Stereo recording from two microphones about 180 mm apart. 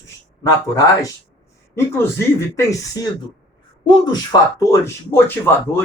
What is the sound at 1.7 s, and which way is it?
Speech, 15° left (ahead or behind).